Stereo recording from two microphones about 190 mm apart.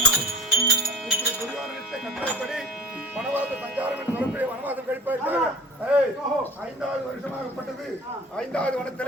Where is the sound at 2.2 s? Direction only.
Centre (ahead or behind).